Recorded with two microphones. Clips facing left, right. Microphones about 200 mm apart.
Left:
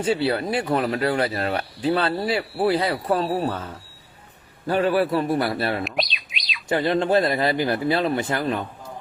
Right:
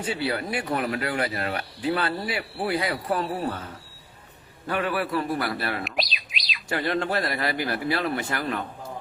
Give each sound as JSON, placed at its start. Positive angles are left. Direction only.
{"t": 0.0, "sound": "speech", "side_deg": 25}
{"t": 4.6, "sound": "speech", "side_deg": 30}
{"t": 5.8, "sound": "bird", "side_deg": 0}
{"t": 6.7, "sound": "speech", "side_deg": 20}